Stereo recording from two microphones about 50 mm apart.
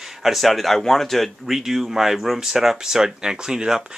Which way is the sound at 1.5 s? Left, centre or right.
Centre.